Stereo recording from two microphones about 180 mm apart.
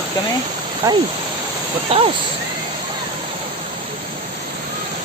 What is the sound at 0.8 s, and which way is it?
Speech, 20° right (ahead or behind).